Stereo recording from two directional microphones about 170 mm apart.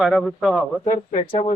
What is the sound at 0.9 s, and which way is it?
Speech, 40° left (ahead or behind).